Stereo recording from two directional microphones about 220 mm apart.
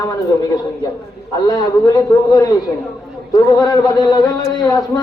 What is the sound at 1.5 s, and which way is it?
Speech, 15° left (ahead or behind).